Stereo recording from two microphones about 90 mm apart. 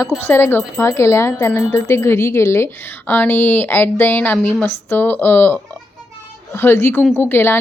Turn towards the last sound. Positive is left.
turn(degrees=25)  # may be behind; listen again after turning